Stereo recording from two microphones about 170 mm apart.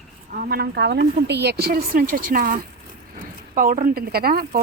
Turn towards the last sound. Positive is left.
turn(degrees=-60)  # may be behind; listen again after turning